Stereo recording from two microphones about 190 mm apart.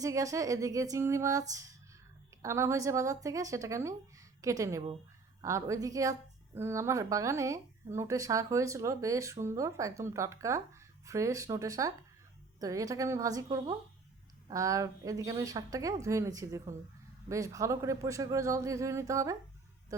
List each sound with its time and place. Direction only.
0.0 s speech: 15° right (ahead or behind)